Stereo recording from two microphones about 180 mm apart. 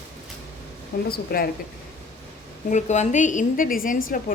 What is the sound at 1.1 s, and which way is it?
Speech, 55° left (ahead or behind).